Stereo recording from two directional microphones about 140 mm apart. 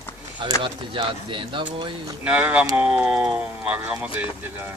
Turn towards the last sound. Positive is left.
turn(degrees=-10)  # may be behind; listen again after turning